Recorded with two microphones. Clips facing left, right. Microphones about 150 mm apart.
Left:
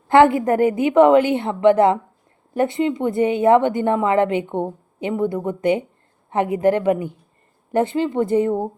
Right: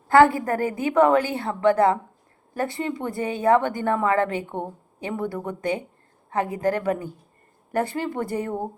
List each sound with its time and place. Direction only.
0.1 s a woman's voice: 20° left (ahead or behind)